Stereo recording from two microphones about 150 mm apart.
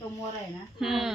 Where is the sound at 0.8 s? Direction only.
Centre (ahead or behind).